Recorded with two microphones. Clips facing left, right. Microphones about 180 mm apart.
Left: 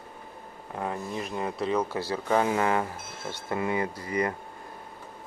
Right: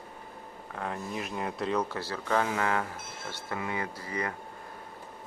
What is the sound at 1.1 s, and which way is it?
Speech, centre (ahead or behind).